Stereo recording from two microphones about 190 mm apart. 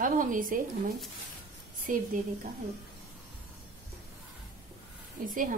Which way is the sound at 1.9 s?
45° right (ahead or behind).